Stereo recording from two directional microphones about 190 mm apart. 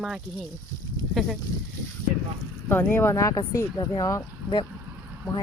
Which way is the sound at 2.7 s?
10° left (ahead or behind).